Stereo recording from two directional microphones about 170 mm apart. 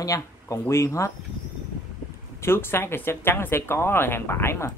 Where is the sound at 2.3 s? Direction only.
15° left (ahead or behind).